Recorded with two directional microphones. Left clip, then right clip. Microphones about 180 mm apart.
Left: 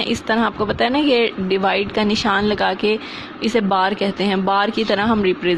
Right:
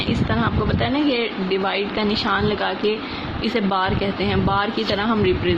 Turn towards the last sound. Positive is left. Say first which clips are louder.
# left 2 dB
turn(degrees=45)  # may be behind; listen again after turning